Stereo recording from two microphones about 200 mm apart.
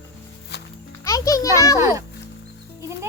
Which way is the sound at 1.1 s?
15° left (ahead or behind).